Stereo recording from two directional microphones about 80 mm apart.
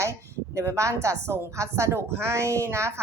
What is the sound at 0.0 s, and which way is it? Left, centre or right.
A woman's voice, right.